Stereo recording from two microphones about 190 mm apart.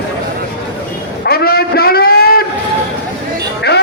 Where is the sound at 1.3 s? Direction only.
55° left (ahead or behind).